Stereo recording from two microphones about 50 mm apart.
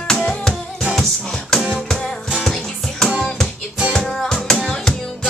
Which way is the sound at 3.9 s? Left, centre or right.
Centre.